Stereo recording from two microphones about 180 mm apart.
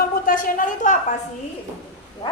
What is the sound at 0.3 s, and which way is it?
Speech, 50° left (ahead or behind).